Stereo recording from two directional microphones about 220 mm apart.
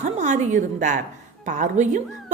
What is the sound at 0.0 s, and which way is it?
A woman's voice, 30° right (ahead or behind).